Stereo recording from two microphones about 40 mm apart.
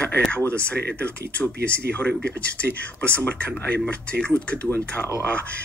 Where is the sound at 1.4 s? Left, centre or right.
Left.